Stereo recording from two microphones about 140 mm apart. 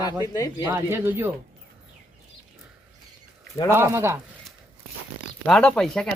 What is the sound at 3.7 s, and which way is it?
Speech, 15° right (ahead or behind).